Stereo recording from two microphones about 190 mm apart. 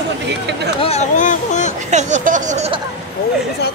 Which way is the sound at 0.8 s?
35° left (ahead or behind).